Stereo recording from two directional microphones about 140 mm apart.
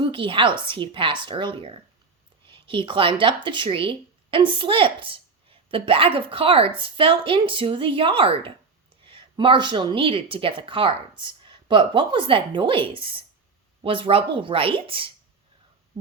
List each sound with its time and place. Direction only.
0.0 s speech: 35° right (ahead or behind)